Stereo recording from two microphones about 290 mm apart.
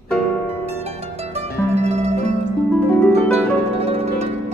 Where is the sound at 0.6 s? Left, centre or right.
Right.